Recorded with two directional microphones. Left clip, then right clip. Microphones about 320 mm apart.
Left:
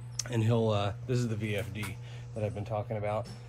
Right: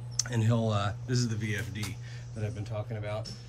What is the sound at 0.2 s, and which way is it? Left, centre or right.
Speech, centre.